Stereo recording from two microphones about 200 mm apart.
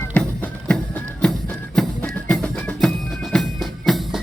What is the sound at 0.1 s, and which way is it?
Music, 5° left (ahead or behind).